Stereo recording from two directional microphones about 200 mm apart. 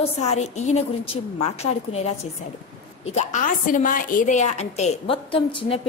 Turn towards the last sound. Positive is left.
turn(degrees=25)  # may be behind; listen again after turning